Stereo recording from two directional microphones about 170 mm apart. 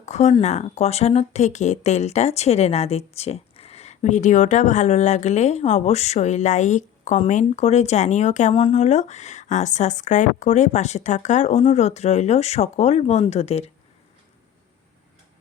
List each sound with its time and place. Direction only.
0.0 s speech: 40° left (ahead or behind)